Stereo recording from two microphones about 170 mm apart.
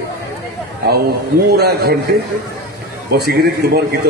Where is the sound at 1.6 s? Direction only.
70° right (ahead or behind).